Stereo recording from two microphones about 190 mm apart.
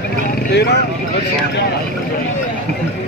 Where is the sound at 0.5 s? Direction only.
60° left (ahead or behind).